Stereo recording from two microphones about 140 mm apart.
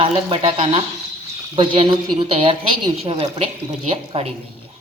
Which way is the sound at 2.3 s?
45° right (ahead or behind).